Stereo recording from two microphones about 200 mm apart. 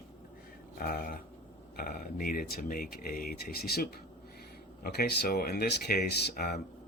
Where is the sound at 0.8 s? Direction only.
50° left (ahead or behind).